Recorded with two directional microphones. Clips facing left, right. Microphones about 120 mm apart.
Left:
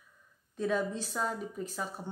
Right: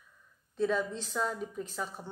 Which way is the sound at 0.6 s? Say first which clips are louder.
Right 1 dB; 10° left (ahead or behind).